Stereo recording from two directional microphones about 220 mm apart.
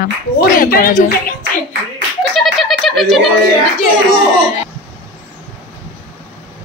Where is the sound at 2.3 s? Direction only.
Centre (ahead or behind).